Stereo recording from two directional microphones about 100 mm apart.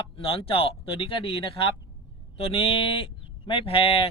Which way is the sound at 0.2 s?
70° left (ahead or behind).